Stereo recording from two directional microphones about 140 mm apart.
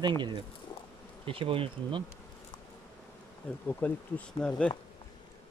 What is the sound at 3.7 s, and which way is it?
Speech, 10° left (ahead or behind).